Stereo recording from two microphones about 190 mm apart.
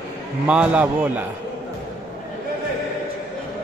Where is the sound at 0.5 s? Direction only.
5° right (ahead or behind).